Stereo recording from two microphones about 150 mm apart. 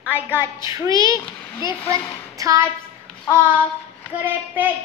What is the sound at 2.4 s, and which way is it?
Speech, 25° right (ahead or behind).